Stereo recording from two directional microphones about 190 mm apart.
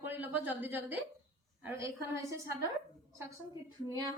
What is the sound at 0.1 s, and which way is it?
A woman's voice, 10° right (ahead or behind).